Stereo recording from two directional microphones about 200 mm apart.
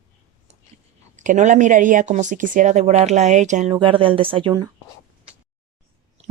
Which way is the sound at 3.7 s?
25° right (ahead or behind).